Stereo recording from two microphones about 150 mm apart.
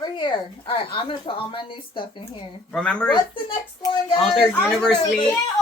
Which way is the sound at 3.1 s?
30° left (ahead or behind).